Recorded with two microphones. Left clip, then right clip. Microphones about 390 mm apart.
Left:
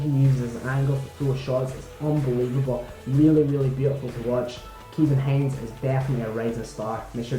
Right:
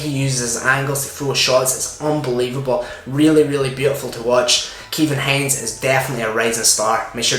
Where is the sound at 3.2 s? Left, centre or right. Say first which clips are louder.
Right 6 dB; centre.